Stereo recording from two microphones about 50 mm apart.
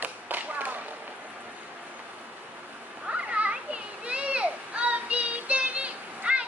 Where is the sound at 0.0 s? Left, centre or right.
Right.